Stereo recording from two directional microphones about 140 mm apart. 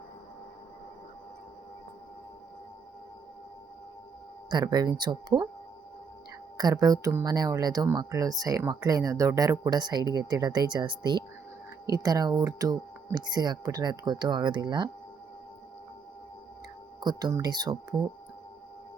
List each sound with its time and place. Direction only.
4.4 s speech: 30° right (ahead or behind)
6.6 s speech: 30° right (ahead or behind)
17.0 s speech: 30° right (ahead or behind)